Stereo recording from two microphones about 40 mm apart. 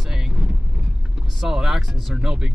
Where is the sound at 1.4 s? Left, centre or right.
Centre.